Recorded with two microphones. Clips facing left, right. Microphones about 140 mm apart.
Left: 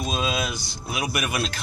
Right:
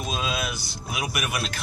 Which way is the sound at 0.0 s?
5° right (ahead or behind).